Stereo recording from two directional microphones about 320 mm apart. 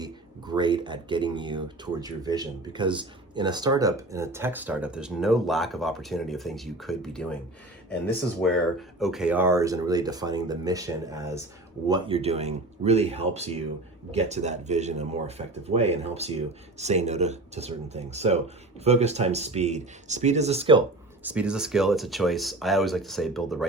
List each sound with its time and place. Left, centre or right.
0.0 s speech: centre
21.2 s speech: centre